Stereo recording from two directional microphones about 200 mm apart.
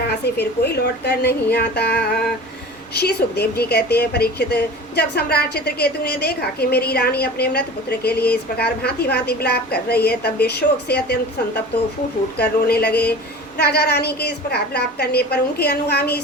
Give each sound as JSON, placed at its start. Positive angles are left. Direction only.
{"t": 0.1, "sound": "a woman's voice", "side_deg": 55}